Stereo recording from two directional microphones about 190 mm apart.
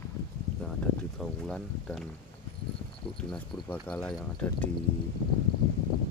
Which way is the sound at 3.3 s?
5° left (ahead or behind).